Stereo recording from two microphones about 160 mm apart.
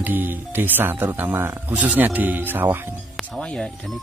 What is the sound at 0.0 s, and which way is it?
Speech, 10° right (ahead or behind).